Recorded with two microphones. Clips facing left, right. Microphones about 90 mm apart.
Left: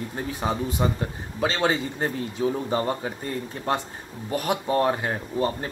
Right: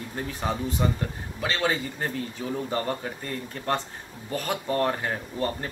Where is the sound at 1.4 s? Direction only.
30° left (ahead or behind).